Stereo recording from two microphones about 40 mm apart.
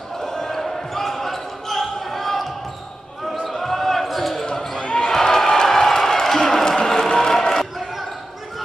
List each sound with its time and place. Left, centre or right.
0.2 s basketball bounce: centre
3.4 s basketball bounce: centre
4.7 s basketball bounce: left
5.0 s a sound: centre